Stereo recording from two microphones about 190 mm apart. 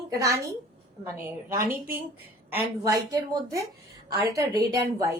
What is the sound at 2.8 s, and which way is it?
A woman's voice, 15° right (ahead or behind).